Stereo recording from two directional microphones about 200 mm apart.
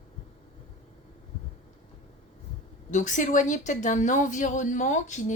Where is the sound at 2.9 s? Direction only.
40° left (ahead or behind).